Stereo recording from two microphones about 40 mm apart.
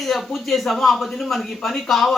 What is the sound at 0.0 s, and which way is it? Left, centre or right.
A man's voice, centre.